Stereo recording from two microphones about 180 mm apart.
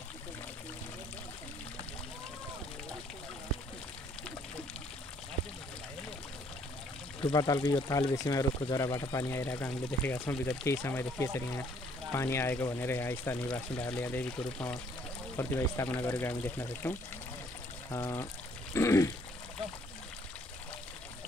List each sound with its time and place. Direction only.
7.2 s speech: 20° left (ahead or behind)